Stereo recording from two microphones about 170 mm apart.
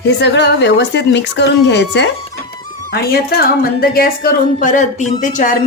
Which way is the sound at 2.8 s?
65° left (ahead or behind).